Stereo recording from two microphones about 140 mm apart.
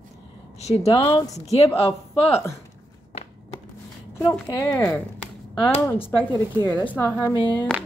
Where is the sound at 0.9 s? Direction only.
35° left (ahead or behind).